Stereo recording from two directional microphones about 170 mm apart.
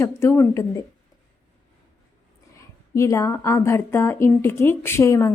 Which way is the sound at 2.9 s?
20° left (ahead or behind).